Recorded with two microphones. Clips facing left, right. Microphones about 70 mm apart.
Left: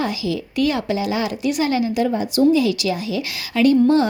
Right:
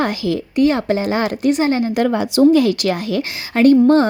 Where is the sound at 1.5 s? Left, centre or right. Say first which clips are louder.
Right 1 dB; right.